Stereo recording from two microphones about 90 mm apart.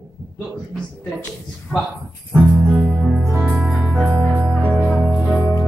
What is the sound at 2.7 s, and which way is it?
Music, 15° right (ahead or behind).